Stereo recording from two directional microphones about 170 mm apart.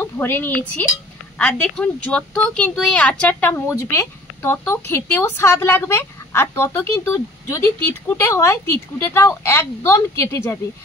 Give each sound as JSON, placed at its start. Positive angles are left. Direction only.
{"t": 0.0, "sound": "speech", "side_deg": 10}